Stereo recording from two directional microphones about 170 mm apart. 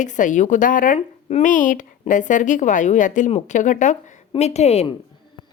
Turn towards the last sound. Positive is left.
turn(degrees=35)  # may be behind; listen again after turning